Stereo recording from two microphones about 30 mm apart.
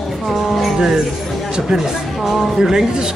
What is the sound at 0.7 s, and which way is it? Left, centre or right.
Speech, centre.